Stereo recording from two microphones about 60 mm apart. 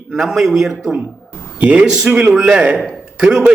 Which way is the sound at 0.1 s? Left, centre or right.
Centre.